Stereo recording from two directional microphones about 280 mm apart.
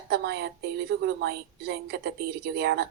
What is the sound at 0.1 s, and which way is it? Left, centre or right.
A woman's voice, right.